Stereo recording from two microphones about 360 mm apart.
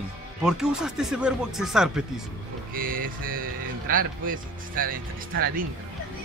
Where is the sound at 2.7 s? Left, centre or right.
Right.